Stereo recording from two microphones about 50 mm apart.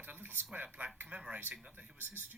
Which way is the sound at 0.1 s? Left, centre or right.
Right.